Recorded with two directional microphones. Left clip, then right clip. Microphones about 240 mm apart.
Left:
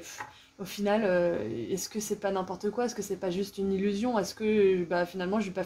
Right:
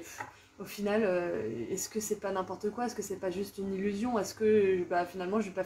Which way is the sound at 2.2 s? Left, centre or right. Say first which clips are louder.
Left 3 dB; left.